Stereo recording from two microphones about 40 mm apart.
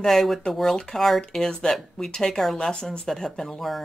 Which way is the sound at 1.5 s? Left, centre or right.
Centre.